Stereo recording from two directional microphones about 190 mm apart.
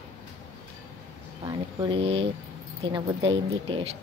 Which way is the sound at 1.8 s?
25° right (ahead or behind).